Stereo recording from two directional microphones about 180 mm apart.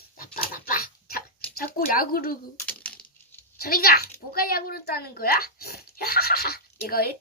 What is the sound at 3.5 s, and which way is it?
Speech, 55° left (ahead or behind).